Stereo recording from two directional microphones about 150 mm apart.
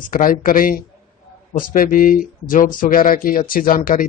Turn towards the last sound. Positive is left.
turn(degrees=70)  # may be behind; listen again after turning